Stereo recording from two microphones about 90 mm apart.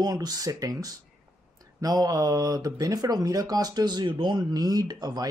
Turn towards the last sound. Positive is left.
turn(degrees=-45)  # may be behind; listen again after turning